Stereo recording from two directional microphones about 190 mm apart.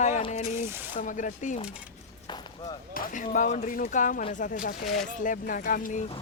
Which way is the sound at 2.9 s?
45° left (ahead or behind).